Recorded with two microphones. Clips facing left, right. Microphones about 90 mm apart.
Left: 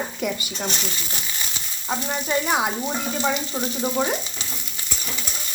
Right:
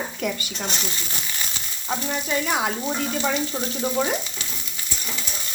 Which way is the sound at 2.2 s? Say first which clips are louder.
Left 3 dB; 25° left (ahead or behind).